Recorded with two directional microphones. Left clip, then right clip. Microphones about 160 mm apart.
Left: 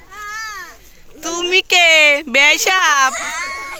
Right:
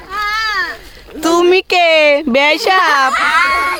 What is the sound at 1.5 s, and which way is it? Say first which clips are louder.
Speech: left 2 dB; 5° right (ahead or behind).